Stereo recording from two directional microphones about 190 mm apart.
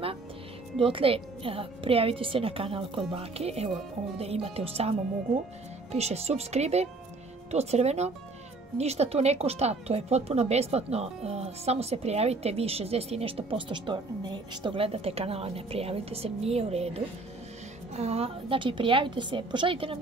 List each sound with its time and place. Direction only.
0.7 s a woman's voice: 30° right (ahead or behind)